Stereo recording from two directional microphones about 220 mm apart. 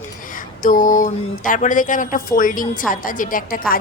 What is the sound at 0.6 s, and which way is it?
A woman's voice, 40° left (ahead or behind).